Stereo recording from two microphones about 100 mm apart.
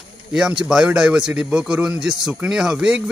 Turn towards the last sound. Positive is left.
turn(degrees=-10)  # may be behind; listen again after turning